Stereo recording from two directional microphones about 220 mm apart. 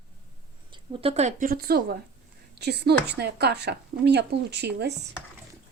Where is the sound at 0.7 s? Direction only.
25° right (ahead or behind); by 4.9 s 50° right (ahead or behind).